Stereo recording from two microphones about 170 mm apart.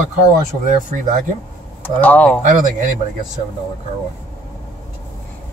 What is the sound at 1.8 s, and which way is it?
Speech, 10° left (ahead or behind).